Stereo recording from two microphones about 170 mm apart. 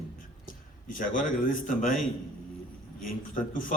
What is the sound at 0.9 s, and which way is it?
A man's voice, 50° left (ahead or behind).